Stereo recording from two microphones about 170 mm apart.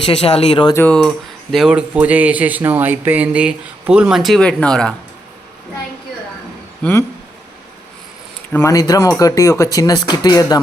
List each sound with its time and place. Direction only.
0.0 s speech: 35° left (ahead or behind)
0.8 s speech: 5° left (ahead or behind)
6.8 s speech: 5° left (ahead or behind)
8.5 s speech: 20° left (ahead or behind)